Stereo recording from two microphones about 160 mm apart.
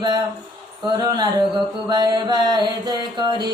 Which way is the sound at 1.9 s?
25° right (ahead or behind).